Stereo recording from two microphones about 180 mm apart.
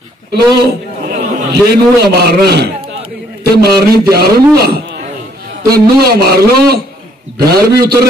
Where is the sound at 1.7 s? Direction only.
65° right (ahead or behind).